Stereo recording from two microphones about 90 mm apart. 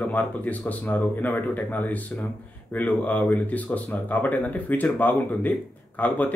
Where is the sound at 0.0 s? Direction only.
15° left (ahead or behind).